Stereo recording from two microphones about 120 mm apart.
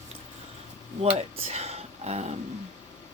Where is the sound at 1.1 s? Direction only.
60° right (ahead or behind).